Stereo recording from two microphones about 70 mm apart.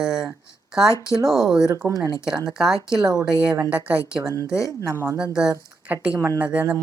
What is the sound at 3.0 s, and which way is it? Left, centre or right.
A woman's voice, right.